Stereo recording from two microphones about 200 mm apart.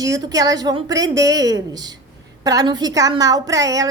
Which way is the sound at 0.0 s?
20° right (ahead or behind).